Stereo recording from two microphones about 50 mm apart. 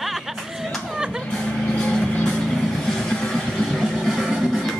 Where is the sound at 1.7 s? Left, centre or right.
Centre.